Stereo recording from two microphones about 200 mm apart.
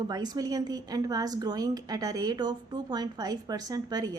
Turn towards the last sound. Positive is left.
turn(degrees=-20)  # may be behind; listen again after turning